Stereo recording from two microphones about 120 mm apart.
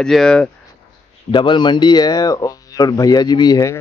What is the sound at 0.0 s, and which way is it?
Speech, 5° left (ahead or behind).